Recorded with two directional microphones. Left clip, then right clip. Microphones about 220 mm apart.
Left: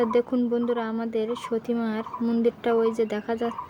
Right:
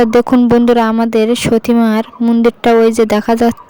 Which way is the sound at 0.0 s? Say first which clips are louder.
Right 13 dB; 50° right (ahead or behind).